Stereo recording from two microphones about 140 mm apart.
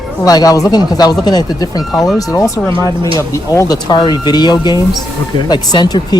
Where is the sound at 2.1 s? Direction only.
25° left (ahead or behind).